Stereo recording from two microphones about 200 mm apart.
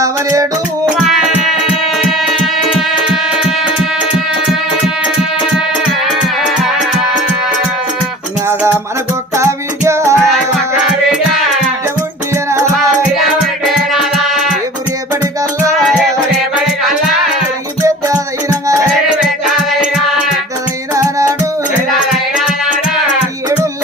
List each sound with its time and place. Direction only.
0.0 s music: 15° right (ahead or behind)
0.9 s music: centre (ahead or behind)
9.4 s music: 15° right (ahead or behind)
13.9 s music: centre (ahead or behind)
20.9 s music: 15° right (ahead or behind)